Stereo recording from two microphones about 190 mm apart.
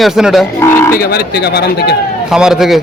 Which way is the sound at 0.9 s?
55° left (ahead or behind).